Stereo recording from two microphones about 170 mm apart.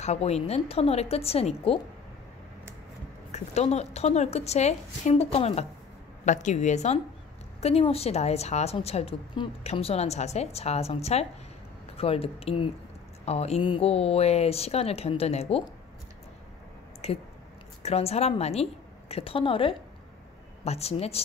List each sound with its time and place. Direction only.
0.0 s a woman's voice: 40° left (ahead or behind)
3.3 s a woman's voice: 40° left (ahead or behind)
17.0 s a woman's voice: 35° left (ahead or behind)